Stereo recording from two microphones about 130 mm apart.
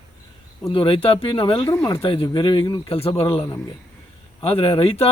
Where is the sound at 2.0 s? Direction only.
45° left (ahead or behind).